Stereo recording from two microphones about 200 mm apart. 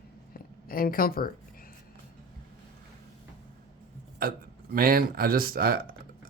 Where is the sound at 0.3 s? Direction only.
45° left (ahead or behind).